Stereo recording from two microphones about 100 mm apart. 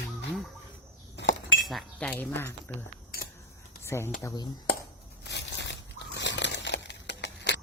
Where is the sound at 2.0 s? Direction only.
15° left (ahead or behind).